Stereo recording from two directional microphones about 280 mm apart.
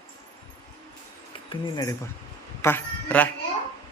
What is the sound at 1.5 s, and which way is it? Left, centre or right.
A man's voice, centre.